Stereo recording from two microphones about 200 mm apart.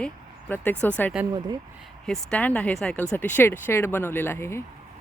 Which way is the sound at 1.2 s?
5° right (ahead or behind).